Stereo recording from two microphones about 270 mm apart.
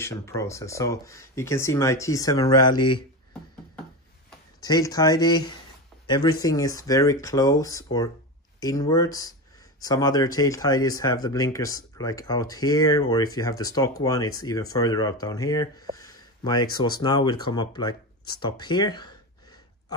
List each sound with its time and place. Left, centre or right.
0.0 s speech: centre
4.6 s speech: centre